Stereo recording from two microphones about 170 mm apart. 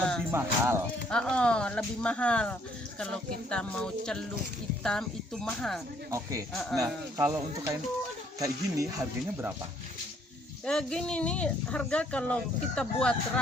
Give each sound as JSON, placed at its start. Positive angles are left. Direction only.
{"t": 0.3, "sound": "speech", "side_deg": -15}
{"t": 1.1, "sound": "speech", "side_deg": 5}
{"t": 6.1, "sound": "speech", "side_deg": -20}
{"t": 6.7, "sound": "music", "side_deg": -20}
{"t": 10.7, "sound": "speech", "side_deg": 5}